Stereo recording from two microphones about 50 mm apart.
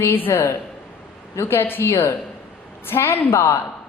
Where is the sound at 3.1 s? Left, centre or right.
Left.